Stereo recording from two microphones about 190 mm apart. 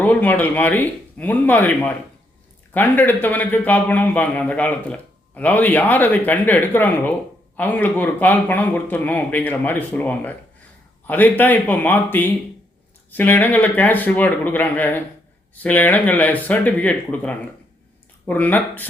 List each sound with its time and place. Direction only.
0.0 s a man's voice: 10° left (ahead or behind)